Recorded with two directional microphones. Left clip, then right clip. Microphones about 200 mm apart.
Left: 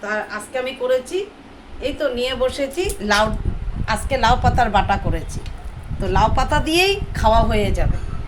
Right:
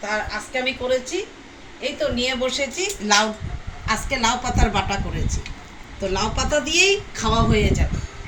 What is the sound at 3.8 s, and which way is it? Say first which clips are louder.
A woman's voice: left 4 dB; 55° left (ahead or behind).